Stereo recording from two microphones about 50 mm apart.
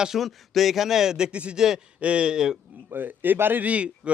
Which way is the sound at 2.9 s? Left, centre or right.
Right.